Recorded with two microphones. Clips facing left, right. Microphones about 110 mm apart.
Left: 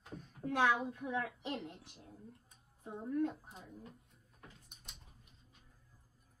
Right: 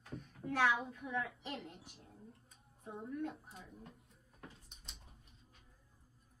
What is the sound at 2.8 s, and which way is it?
Speech, 30° left (ahead or behind).